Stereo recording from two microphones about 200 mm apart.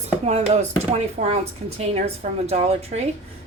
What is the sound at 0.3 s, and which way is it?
Speech, 35° right (ahead or behind).